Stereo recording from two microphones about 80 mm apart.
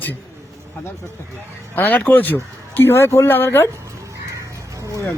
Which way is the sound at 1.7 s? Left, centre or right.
Left.